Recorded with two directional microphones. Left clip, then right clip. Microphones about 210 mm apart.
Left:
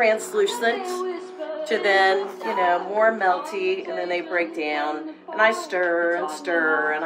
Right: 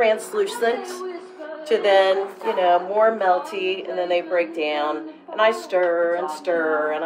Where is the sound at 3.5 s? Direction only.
25° left (ahead or behind).